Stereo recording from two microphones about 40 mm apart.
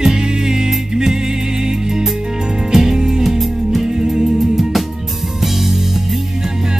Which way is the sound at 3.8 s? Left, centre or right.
Centre.